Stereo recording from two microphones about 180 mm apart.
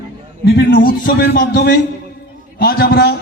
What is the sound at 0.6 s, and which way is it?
Speech, 90° left.